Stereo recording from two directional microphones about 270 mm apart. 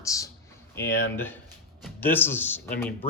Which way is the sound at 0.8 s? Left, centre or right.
Centre.